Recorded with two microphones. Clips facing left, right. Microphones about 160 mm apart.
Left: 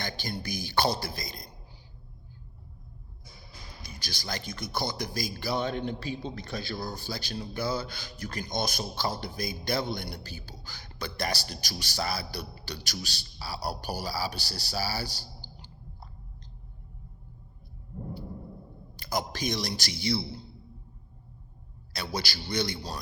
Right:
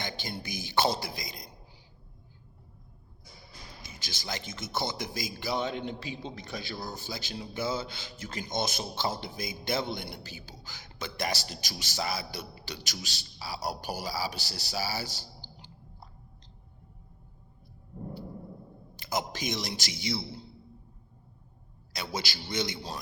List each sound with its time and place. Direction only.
0.0 s speech: 20° right (ahead or behind)
3.8 s speech: 20° right (ahead or behind)
18.9 s speech: 20° right (ahead or behind)
21.9 s speech: 20° right (ahead or behind)